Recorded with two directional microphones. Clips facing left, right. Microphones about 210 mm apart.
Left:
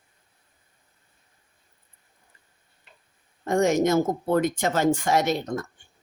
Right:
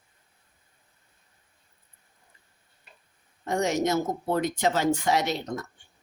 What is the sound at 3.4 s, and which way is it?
Speech, 50° left (ahead or behind).